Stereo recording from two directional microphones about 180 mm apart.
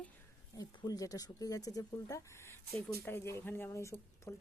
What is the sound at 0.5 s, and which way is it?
A woman's voice, 20° left (ahead or behind).